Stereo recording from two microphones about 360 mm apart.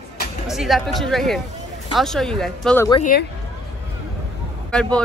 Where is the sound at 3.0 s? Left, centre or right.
Left.